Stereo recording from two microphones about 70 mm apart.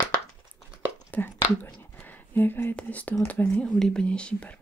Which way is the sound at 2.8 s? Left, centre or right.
Left.